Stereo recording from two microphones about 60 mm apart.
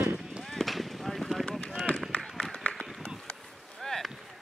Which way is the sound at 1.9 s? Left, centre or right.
Left.